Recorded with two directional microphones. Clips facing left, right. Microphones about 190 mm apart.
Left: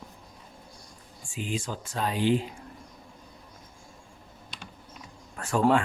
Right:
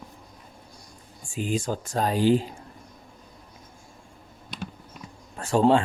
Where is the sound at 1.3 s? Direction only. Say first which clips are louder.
Right 6 dB; 45° right (ahead or behind).